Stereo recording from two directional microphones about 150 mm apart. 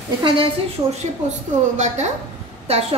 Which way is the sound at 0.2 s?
35° right (ahead or behind).